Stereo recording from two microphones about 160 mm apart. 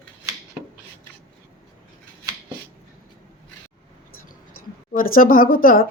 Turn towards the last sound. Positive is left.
turn(degrees=60)  # may be behind; listen again after turning